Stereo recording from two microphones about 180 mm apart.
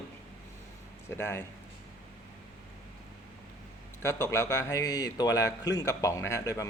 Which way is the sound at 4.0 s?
15° left (ahead or behind).